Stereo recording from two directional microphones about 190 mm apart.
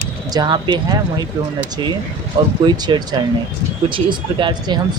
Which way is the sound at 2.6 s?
20° right (ahead or behind).